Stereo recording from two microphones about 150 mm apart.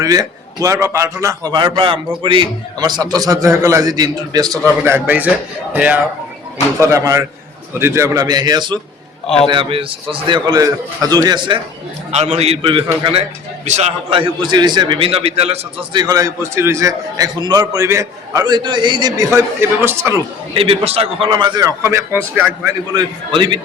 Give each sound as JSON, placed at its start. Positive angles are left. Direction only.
{"t": 0.0, "sound": "a man's voice", "side_deg": -25}
{"t": 4.8, "sound": "a man's voice", "side_deg": -15}
{"t": 6.7, "sound": "a man's voice", "side_deg": -20}
{"t": 9.2, "sound": "a man's voice", "side_deg": 5}
{"t": 9.5, "sound": "a man's voice", "side_deg": -35}
{"t": 12.1, "sound": "a man's voice", "side_deg": -45}
{"t": 20.5, "sound": "a man's voice", "side_deg": -35}
{"t": 21.8, "sound": "a man's voice", "side_deg": -15}
{"t": 22.9, "sound": "a man's voice", "side_deg": -30}